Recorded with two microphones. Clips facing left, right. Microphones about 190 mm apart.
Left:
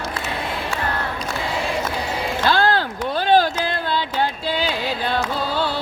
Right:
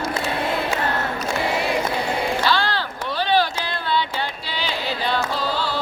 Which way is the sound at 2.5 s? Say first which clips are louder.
Left 4 dB; 50° left (ahead or behind).